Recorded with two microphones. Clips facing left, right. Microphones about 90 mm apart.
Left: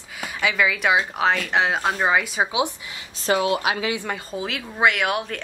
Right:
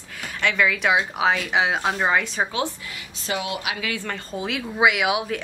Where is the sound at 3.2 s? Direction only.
40° left (ahead or behind).